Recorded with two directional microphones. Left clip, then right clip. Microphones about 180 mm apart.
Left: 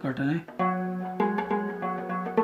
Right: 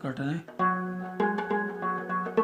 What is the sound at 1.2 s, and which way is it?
Music, 45° right (ahead or behind).